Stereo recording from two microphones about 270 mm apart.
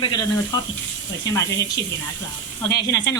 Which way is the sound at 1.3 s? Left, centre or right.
Centre.